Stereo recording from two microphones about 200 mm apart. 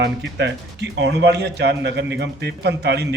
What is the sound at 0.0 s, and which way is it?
Speech, 60° right (ahead or behind).